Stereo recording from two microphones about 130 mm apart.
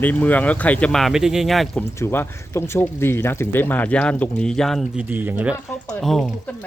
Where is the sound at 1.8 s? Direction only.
15° left (ahead or behind).